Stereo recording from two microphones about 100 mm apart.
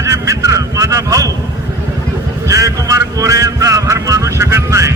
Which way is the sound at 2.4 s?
30° right (ahead or behind).